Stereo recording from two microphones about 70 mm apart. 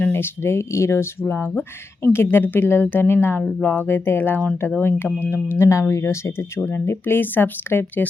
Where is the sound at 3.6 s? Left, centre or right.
Left.